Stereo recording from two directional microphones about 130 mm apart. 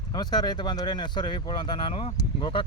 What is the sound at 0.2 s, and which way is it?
Speech, 30° left (ahead or behind).